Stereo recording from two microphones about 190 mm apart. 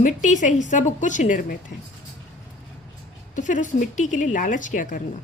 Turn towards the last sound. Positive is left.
turn(degrees=40)  # may be behind; listen again after turning